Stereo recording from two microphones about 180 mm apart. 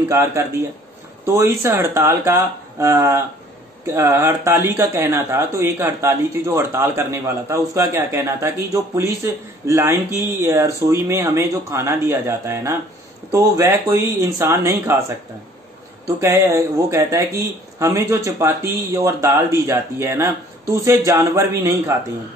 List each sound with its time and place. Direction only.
0.1 s speech: 15° right (ahead or behind)
16.2 s speech: 15° right (ahead or behind)